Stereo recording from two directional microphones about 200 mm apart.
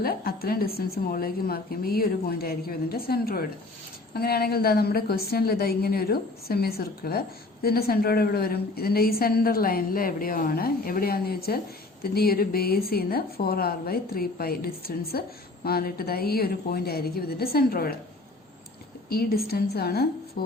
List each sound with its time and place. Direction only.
0.0 s a woman's voice: 50° left (ahead or behind)
19.0 s a woman's voice: 50° left (ahead or behind)